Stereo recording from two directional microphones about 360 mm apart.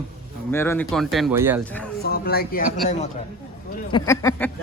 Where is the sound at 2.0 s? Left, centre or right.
Left.